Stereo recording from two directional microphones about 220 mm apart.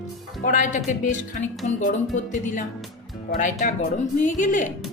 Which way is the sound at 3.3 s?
35° left (ahead or behind).